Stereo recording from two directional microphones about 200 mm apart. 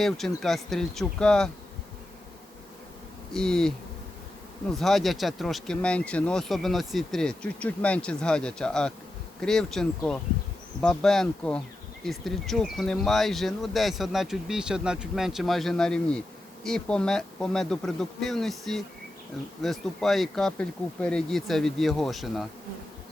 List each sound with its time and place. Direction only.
0.0 s speech: centre (ahead or behind)
3.3 s speech: 5° left (ahead or behind)
4.8 s speech: centre (ahead or behind)